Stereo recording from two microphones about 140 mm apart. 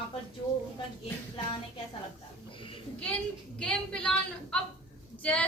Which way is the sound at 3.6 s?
5° left (ahead or behind).